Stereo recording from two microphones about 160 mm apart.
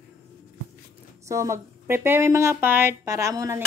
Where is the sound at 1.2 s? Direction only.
20° right (ahead or behind).